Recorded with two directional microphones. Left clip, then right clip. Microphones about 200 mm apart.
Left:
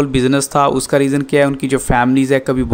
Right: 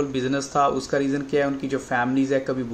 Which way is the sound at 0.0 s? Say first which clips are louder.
Left 10 dB; 50° left (ahead or behind).